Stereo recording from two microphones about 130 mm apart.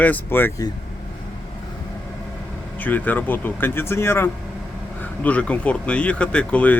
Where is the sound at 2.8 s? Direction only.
15° left (ahead or behind).